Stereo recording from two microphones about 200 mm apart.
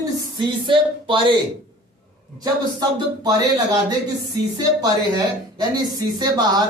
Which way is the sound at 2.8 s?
20° right (ahead or behind).